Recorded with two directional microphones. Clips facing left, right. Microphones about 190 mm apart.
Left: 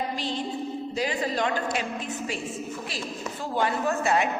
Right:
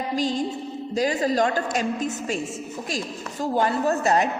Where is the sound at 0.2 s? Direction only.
40° right (ahead or behind).